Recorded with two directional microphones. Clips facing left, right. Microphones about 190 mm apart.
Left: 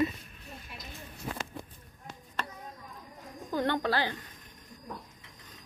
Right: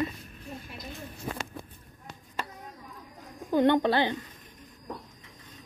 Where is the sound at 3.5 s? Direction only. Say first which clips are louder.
Right 7 dB; 20° right (ahead or behind).